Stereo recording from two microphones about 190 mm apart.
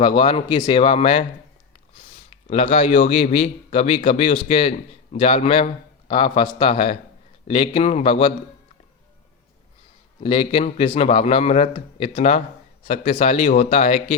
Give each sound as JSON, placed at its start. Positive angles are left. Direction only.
{"t": 0.0, "sound": "a man's voice", "side_deg": 25}
{"t": 10.2, "sound": "a man's voice", "side_deg": 30}